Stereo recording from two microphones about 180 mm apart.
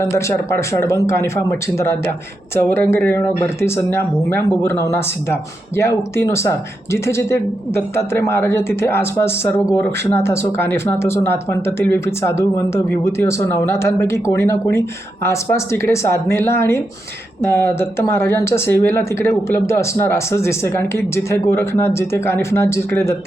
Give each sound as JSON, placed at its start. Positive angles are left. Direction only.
{"t": 0.0, "sound": "speech", "side_deg": 15}